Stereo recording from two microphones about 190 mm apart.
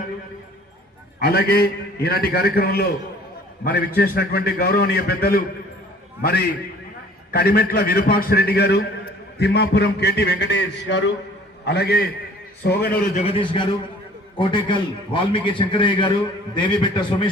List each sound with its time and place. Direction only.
1.2 s a man's voice: 55° left (ahead or behind)
13.1 s a man's voice: 30° left (ahead or behind)